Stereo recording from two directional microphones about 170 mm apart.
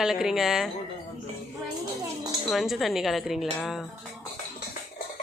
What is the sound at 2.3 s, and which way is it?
Speech, centre (ahead or behind).